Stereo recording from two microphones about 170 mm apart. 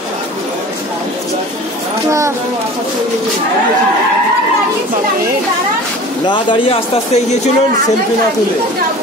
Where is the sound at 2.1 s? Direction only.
15° right (ahead or behind).